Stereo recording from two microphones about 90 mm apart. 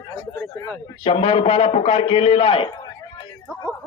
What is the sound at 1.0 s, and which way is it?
A man's voice, 90° left.